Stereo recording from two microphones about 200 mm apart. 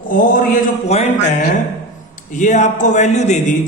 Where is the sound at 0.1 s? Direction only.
40° left (ahead or behind).